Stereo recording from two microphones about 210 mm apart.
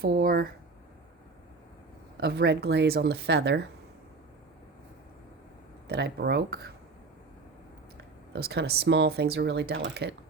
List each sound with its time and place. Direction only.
0.0 s speech: 45° right (ahead or behind)
2.1 s speech: 50° right (ahead or behind)
5.9 s speech: 50° right (ahead or behind)
7.9 s speech: 50° right (ahead or behind)